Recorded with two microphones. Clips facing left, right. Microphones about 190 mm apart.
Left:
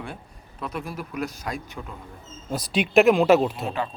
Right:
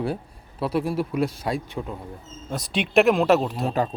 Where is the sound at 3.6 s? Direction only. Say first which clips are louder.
Right 4 dB; 40° right (ahead or behind).